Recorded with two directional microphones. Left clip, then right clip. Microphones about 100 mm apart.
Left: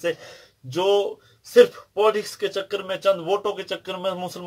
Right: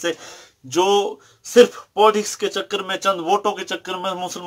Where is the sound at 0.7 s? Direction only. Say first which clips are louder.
Right 3 dB; 45° right (ahead or behind).